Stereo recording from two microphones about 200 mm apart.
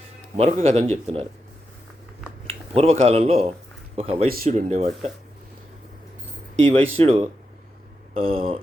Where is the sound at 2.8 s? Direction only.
30° right (ahead or behind).